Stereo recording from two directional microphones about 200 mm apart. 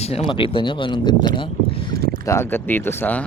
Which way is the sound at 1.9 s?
50° right (ahead or behind).